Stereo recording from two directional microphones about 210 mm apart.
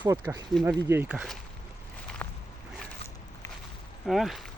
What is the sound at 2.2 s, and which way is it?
Walk, 10° left (ahead or behind).